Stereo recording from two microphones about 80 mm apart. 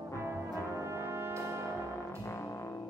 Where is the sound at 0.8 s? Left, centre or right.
Right.